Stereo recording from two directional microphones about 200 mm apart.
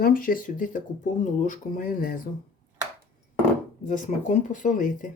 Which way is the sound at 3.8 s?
40° left (ahead or behind).